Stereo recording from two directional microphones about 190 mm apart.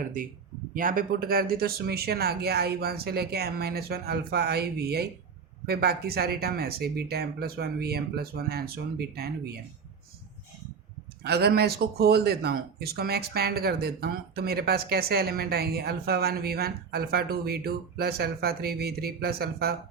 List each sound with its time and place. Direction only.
0.7 s speech: 45° right (ahead or behind)
11.2 s speech: 55° right (ahead or behind)